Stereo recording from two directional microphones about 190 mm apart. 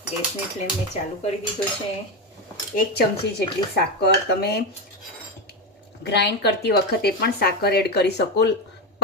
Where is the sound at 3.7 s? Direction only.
55° left (ahead or behind).